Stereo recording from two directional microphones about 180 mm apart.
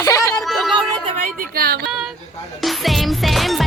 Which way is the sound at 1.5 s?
60° right (ahead or behind).